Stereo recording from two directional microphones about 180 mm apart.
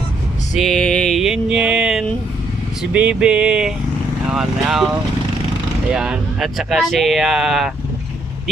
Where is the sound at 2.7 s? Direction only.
5° right (ahead or behind).